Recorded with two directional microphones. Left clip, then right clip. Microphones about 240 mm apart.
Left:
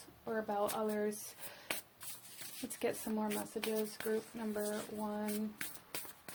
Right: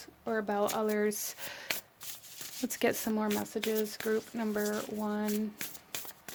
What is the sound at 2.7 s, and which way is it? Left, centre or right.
Speech, right.